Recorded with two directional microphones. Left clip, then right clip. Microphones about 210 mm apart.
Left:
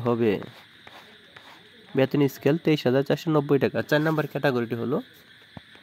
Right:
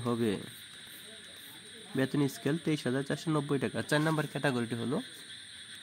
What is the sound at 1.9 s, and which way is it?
Speech, 30° left (ahead or behind).